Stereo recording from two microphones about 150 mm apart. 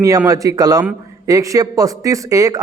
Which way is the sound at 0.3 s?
25° right (ahead or behind).